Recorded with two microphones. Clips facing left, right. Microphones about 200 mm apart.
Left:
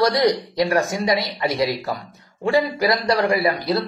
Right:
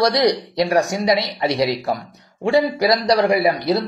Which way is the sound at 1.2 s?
20° right (ahead or behind).